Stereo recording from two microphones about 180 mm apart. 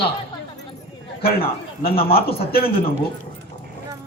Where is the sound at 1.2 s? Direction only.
30° left (ahead or behind).